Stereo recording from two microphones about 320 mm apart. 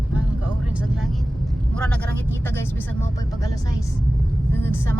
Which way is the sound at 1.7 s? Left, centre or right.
Centre.